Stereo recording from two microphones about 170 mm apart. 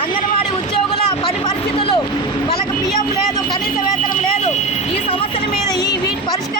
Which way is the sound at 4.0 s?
50° left (ahead or behind).